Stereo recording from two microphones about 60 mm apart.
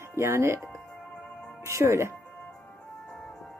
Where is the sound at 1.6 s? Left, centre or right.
Right.